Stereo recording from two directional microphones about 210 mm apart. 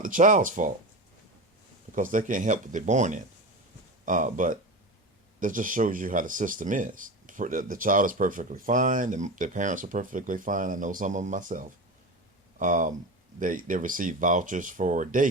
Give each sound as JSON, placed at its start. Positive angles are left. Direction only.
{"t": 0.0, "sound": "speech", "side_deg": -40}
{"t": 1.9, "sound": "speech", "side_deg": -40}